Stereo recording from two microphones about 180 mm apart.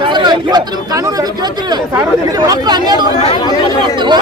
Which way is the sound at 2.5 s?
20° right (ahead or behind).